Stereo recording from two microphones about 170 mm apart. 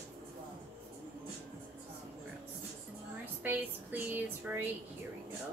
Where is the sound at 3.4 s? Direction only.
10° right (ahead or behind).